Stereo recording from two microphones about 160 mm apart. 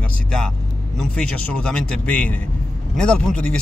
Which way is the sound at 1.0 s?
5° left (ahead or behind).